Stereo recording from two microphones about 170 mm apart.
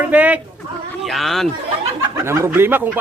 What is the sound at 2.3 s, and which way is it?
Speech, 15° right (ahead or behind).